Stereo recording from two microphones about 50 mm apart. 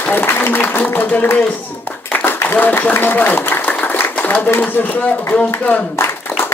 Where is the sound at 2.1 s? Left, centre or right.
Left.